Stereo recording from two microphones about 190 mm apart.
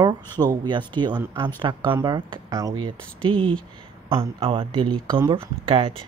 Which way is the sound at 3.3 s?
5° left (ahead or behind).